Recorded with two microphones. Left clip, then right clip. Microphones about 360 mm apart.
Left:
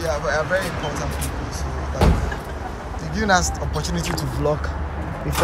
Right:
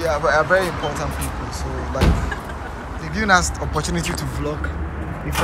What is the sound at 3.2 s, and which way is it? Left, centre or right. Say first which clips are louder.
Speech: right 2 dB; centre.